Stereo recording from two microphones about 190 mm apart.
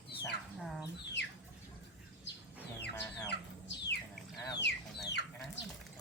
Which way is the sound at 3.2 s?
60° left (ahead or behind).